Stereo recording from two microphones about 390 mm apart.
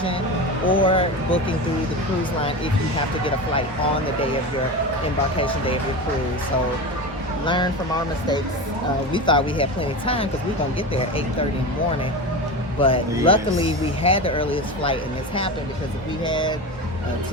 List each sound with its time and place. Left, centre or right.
0.7 s speech: centre
7.4 s speech: centre
9.1 s speech: centre
12.8 s speech: centre
16.2 s speech: centre